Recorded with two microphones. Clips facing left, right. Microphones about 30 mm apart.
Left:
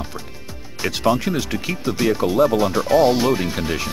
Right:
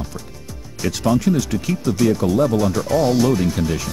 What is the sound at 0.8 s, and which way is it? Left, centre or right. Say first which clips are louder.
Speech: right 1 dB; left.